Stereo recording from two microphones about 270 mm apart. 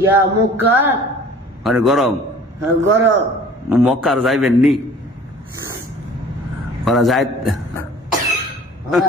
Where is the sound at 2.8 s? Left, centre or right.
Right.